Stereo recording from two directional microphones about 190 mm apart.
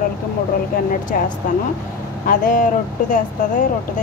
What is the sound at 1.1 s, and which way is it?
A woman's voice, 50° left (ahead or behind).